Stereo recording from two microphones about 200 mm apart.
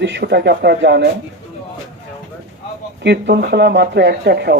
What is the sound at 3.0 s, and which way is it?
A man's voice, 55° right (ahead or behind).